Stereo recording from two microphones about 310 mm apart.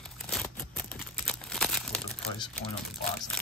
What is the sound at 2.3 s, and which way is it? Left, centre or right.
Speech, centre.